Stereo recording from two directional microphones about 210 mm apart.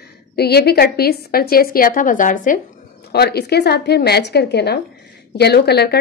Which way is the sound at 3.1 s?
50° left (ahead or behind).